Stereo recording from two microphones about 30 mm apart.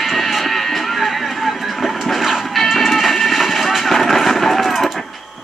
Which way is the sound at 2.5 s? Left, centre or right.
Centre.